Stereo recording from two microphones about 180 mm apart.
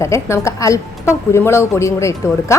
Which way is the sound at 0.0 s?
15° left (ahead or behind).